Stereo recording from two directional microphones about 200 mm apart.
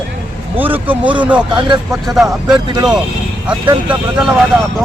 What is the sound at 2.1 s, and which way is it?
Speech, centre (ahead or behind).